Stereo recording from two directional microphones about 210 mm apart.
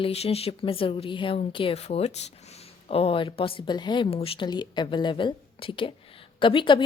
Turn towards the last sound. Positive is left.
turn(degrees=20)  # may be behind; listen again after turning